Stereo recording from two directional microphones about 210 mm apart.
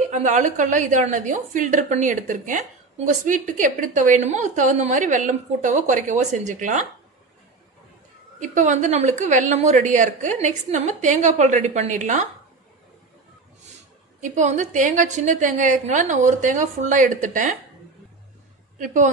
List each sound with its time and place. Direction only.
0.1 s a woman's voice: 35° right (ahead or behind)
8.4 s a woman's voice: 35° right (ahead or behind)
14.2 s a woman's voice: 35° right (ahead or behind)